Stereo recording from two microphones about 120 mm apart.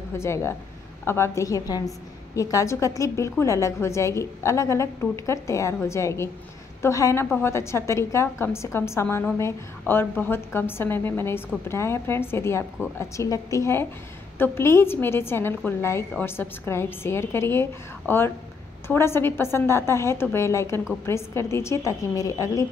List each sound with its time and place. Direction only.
0.1 s a woman's voice: 20° left (ahead or behind)